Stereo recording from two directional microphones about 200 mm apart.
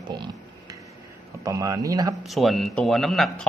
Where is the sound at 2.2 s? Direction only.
Centre (ahead or behind).